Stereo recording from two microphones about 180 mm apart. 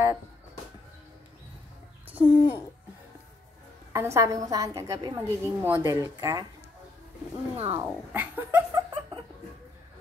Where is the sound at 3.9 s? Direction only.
15° right (ahead or behind).